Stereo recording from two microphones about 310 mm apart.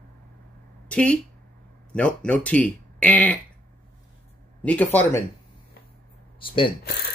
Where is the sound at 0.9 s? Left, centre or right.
Centre.